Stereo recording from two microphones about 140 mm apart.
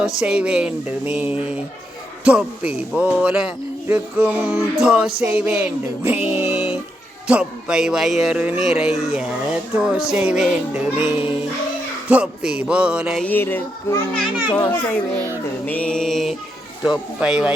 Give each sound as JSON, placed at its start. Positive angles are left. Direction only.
{"t": 0.2, "sound": "speech", "side_deg": -5}
{"t": 13.2, "sound": "a child's voice", "side_deg": 15}
{"t": 14.1, "sound": "speech", "side_deg": 5}
{"t": 14.7, "sound": "a child's voice", "side_deg": 15}